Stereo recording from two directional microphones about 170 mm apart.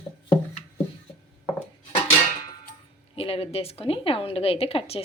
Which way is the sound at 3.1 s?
35° left (ahead or behind).